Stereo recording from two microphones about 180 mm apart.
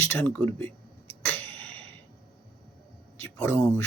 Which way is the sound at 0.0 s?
10° left (ahead or behind).